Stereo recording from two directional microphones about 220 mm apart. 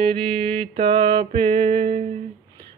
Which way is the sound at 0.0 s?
25° right (ahead or behind).